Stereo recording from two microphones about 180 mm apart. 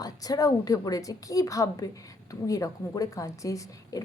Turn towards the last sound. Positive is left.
turn(degrees=20)  # may be behind; listen again after turning